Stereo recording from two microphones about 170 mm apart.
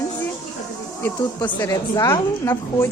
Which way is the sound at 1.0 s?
15° left (ahead or behind).